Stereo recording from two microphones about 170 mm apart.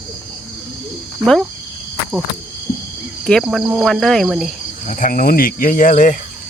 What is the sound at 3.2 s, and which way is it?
Speech, centre (ahead or behind).